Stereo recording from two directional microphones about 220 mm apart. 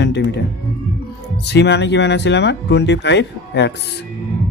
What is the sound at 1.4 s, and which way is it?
Speech, 50° left (ahead or behind).